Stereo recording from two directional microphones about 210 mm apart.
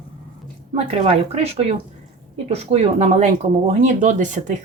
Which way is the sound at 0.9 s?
30° right (ahead or behind).